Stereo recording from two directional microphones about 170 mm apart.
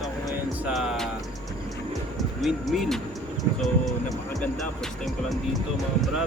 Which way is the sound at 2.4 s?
Centre (ahead or behind).